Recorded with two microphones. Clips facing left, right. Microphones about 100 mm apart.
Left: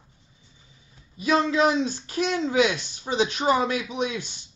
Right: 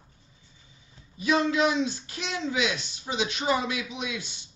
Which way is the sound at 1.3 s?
35° left (ahead or behind).